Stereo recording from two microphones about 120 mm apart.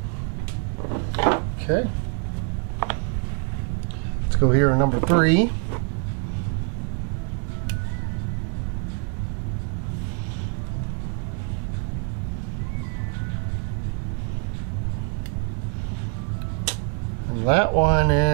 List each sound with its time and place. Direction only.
0.9 s drawer open or close: 15° right (ahead or behind)
4.4 s speech: 15° right (ahead or behind)
16.7 s a sound: 10° right (ahead or behind)
17.5 s speech: 15° right (ahead or behind)